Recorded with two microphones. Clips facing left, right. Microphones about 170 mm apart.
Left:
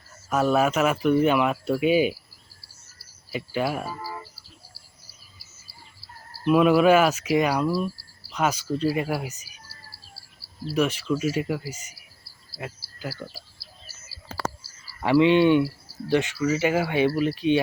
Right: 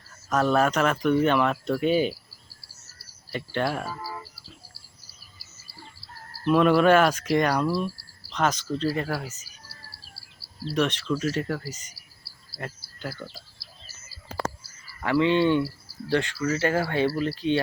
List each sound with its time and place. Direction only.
0.3 s speech: 5° left (ahead or behind)
3.2 s speech: 5° left (ahead or behind)
6.4 s speech: 5° left (ahead or behind)
10.6 s speech: 5° left (ahead or behind)
15.0 s speech: 20° left (ahead or behind)